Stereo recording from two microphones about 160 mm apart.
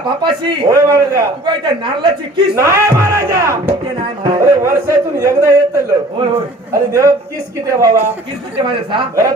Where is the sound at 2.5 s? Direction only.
15° right (ahead or behind).